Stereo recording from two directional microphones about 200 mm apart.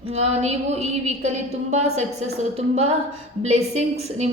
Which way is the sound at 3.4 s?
35° right (ahead or behind).